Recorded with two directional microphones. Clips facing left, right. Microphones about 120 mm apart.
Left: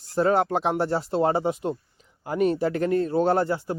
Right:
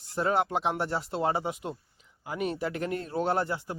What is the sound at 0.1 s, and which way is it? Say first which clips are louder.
Speech: left 6 dB; 35° left (ahead or behind).